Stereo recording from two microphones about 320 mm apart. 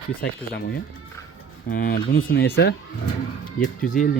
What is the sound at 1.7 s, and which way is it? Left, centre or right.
Speech, left.